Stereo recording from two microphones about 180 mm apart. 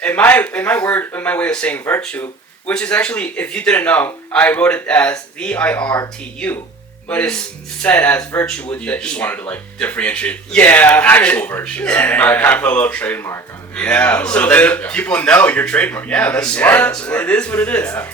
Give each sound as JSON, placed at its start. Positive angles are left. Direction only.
{"t": 0.0, "sound": "speech", "side_deg": 10}
{"t": 7.1, "sound": "speech", "side_deg": 5}